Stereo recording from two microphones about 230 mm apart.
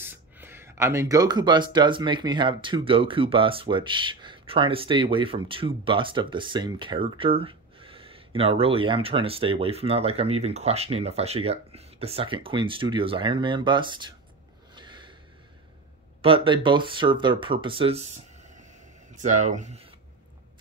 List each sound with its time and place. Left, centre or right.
0.0 s speech: centre
14.8 s snort: centre
16.2 s speech: right